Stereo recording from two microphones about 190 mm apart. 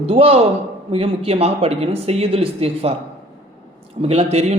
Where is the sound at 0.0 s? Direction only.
30° right (ahead or behind).